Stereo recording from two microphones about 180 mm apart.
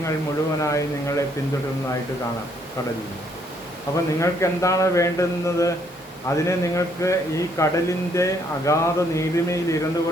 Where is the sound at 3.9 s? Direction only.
15° left (ahead or behind).